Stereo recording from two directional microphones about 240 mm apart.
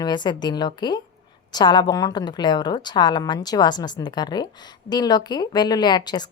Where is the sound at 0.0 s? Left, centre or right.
Centre.